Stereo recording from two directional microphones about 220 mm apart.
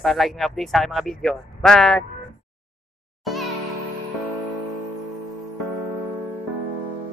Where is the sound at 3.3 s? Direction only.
Centre (ahead or behind).